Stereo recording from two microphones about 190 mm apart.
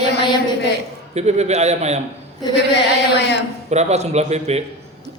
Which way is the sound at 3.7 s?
35° right (ahead or behind).